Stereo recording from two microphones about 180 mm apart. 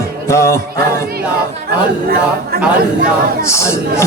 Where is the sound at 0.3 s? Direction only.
15° left (ahead or behind).